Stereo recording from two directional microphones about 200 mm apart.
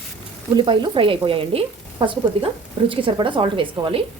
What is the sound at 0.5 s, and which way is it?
Speech, 25° right (ahead or behind).